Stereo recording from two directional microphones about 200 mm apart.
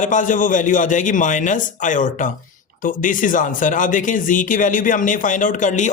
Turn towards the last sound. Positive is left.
turn(degrees=40)  # may be behind; listen again after turning